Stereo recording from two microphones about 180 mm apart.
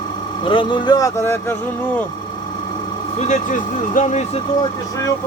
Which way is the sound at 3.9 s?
45° left (ahead or behind).